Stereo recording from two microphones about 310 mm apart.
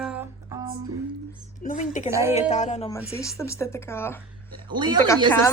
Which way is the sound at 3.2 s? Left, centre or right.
Centre.